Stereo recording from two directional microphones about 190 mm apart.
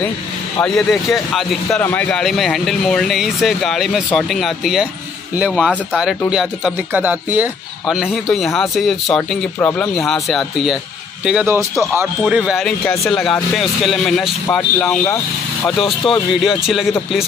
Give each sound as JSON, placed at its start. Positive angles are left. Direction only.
{"t": 0.6, "sound": "speech", "side_deg": 0}